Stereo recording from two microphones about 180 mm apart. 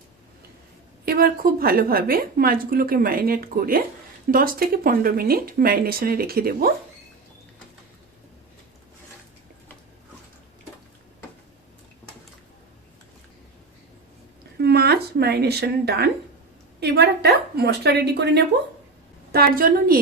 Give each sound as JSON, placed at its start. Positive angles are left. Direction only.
{"t": 1.0, "sound": "a woman's voice", "side_deg": -55}
{"t": 14.6, "sound": "a sound", "side_deg": -65}
{"t": 16.8, "sound": "a woman's voice", "side_deg": -65}
{"t": 19.3, "sound": "a woman's voice", "side_deg": -55}